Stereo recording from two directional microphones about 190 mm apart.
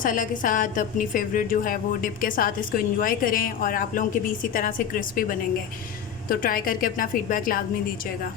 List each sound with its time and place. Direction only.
0.0 s a woman's voice: 45° left (ahead or behind)